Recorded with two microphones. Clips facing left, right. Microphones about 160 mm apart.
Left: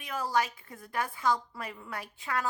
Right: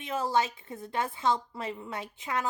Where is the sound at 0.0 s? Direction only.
25° right (ahead or behind).